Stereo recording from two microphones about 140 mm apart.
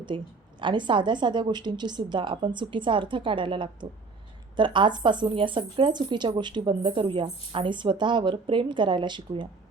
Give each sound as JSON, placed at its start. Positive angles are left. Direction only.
{"t": 0.1, "sound": "speech", "side_deg": -35}